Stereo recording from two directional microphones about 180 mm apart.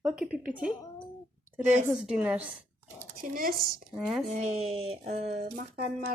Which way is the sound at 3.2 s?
50° right (ahead or behind).